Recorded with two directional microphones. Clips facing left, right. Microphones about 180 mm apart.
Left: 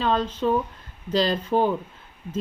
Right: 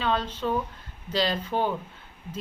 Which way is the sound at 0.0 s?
40° left (ahead or behind).